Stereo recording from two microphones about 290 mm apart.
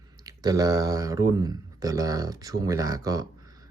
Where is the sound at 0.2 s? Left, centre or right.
Centre.